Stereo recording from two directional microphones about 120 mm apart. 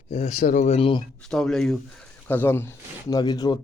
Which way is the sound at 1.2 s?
5° left (ahead or behind).